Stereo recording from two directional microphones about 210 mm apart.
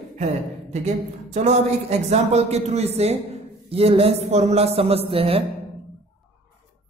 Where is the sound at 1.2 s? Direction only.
30° right (ahead or behind).